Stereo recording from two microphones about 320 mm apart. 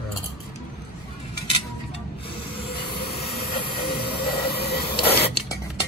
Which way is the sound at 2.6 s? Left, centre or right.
Centre.